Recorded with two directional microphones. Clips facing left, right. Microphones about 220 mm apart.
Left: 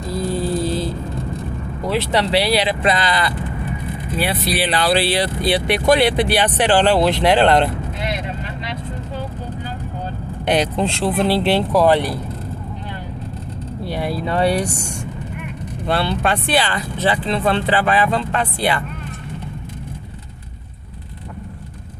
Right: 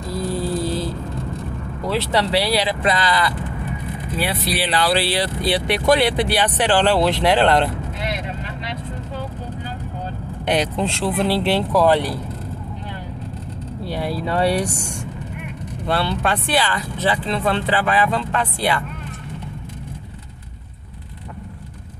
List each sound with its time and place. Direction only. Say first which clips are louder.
0.1 s mantra: left 2 dB; 25° left (ahead or behind)
1.8 s speech: left 1 dB; 20° left (ahead or behind)
10.4 s speech: left 2 dB; 30° left (ahead or behind)
13.8 s speech: left 1 dB; 15° left (ahead or behind)
14.2 s speech: left 1 dB; 5° right (ahead or behind)
15.9 s speech: left 2 dB; 20° left (ahead or behind)